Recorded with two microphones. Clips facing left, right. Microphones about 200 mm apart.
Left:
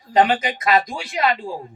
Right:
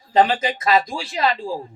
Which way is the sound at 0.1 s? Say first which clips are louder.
Even; 30° right (ahead or behind).